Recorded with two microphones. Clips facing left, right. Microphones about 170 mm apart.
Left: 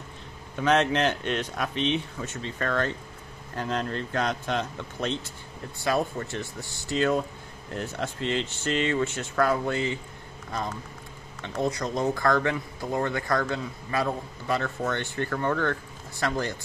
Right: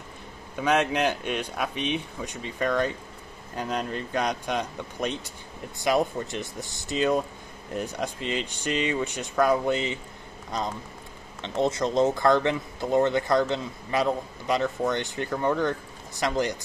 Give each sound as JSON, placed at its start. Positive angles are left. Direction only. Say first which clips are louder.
{"t": 0.6, "sound": "speech", "louder": "left 1 dB", "side_deg": -10}